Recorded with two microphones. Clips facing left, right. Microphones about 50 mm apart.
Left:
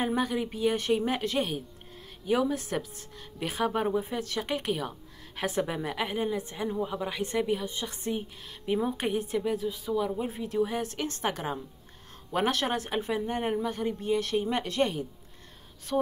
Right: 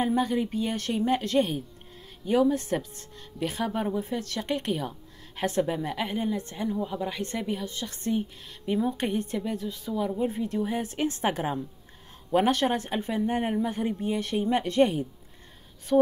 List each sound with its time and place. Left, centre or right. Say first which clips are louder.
0.0 s a woman's voice: right 3 dB; centre
12.3 s a woman's voice: right 4 dB; centre
13.6 s a woman's voice: right 2 dB; centre
15.9 s a woman's voice: right 7 dB; centre